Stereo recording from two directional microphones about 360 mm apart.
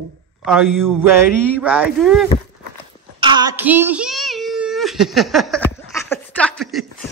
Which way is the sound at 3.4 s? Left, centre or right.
Centre.